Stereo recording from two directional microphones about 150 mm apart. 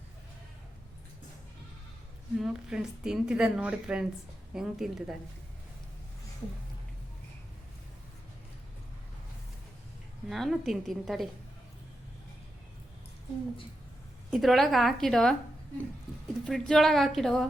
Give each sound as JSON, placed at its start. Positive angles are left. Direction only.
{"t": 2.4, "sound": "a woman's voice", "side_deg": -5}
{"t": 10.2, "sound": "a woman's voice", "side_deg": 0}
{"t": 14.3, "sound": "a woman's voice", "side_deg": 0}
{"t": 16.4, "sound": "a woman's voice", "side_deg": 0}